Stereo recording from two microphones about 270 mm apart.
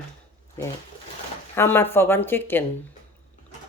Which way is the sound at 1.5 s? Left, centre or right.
Centre.